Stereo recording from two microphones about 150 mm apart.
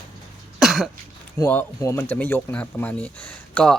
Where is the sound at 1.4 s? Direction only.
20° left (ahead or behind).